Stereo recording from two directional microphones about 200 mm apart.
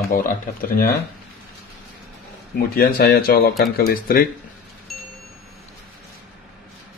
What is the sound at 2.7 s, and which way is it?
Speech, 50° left (ahead or behind).